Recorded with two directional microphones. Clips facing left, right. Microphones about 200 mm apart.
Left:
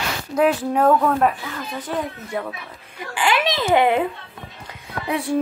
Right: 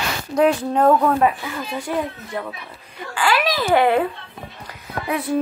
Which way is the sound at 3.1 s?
20° left (ahead or behind).